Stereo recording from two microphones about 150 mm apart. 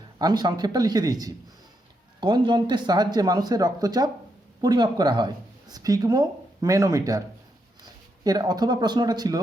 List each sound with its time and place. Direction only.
0.2 s speech: 25° right (ahead or behind)